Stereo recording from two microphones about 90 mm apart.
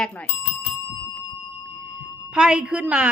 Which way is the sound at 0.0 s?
15° left (ahead or behind).